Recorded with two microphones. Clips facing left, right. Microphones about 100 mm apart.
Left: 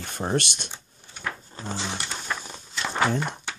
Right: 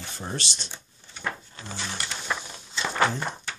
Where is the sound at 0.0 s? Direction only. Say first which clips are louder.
Left 8 dB; 55° left (ahead or behind).